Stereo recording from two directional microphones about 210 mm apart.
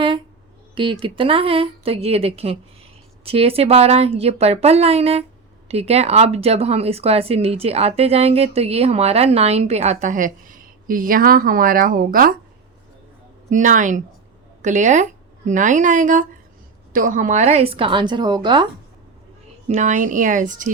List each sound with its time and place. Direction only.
0.8 s speech: 25° right (ahead or behind); by 12.3 s 40° right (ahead or behind)
13.5 s speech: 35° right (ahead or behind); by 18.7 s 20° right (ahead or behind)
19.6 s speech: 35° right (ahead or behind)